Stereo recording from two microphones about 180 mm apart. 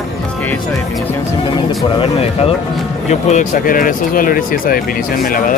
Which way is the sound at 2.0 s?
35° left (ahead or behind).